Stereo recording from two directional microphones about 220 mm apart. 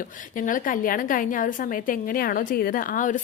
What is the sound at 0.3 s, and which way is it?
A woman's voice, 35° left (ahead or behind).